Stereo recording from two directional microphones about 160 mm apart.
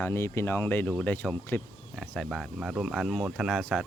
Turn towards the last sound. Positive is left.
turn(degrees=5)  # may be behind; listen again after turning